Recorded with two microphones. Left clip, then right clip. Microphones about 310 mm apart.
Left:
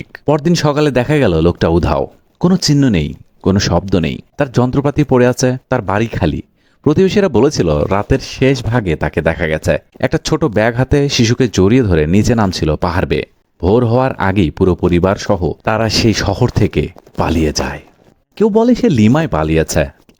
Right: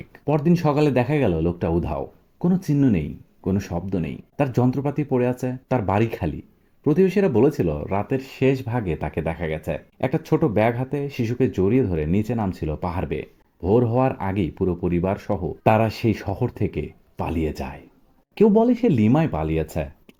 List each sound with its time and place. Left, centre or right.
0.1 s speech: left
15.9 s speech: left
16.1 s speech: left
16.6 s speech: left
17.2 s speech: left